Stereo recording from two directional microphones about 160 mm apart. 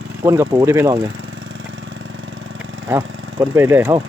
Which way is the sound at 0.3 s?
15° right (ahead or behind).